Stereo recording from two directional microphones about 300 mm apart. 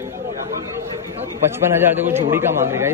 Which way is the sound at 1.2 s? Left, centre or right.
Centre.